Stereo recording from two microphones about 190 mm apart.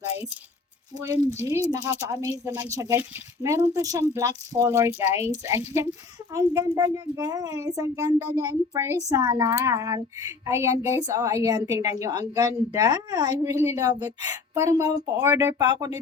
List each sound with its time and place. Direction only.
0.9 s a child's voice: 20° right (ahead or behind)